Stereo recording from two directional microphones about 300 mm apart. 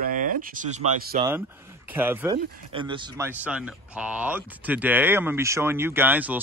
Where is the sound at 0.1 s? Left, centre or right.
Right.